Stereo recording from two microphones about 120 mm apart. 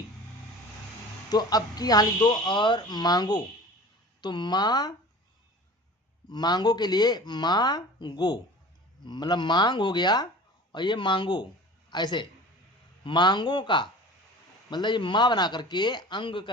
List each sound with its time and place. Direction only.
1.3 s speech: 35° left (ahead or behind)
6.3 s speech: 35° left (ahead or behind)